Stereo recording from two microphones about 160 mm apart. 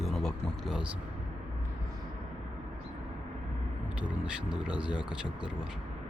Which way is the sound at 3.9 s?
5° right (ahead or behind).